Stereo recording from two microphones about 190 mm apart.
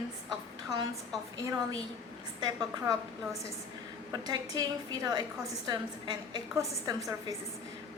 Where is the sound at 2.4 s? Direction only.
20° right (ahead or behind).